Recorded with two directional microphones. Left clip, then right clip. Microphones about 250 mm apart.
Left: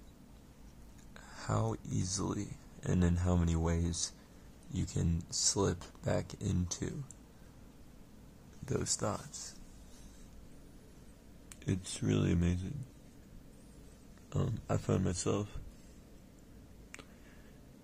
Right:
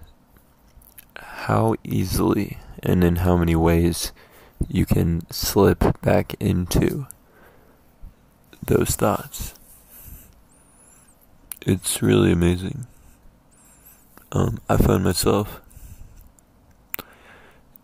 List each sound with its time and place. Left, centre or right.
1.1 s speech: right
5.2 s speech: right
8.6 s speech: right
11.6 s speech: right
14.3 s speech: right
16.9 s a sound: right